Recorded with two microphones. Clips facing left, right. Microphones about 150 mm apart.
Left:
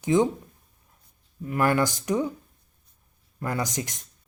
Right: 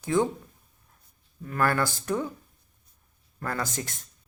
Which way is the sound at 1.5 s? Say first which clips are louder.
Left 3 dB; 15° left (ahead or behind).